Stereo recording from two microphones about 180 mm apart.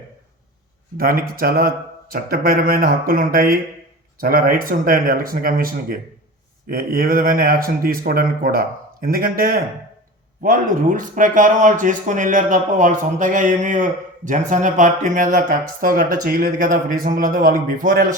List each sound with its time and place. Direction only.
0.9 s speech: 55° right (ahead or behind)